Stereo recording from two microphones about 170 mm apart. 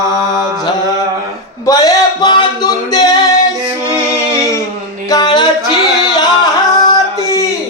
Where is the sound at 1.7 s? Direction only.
20° left (ahead or behind).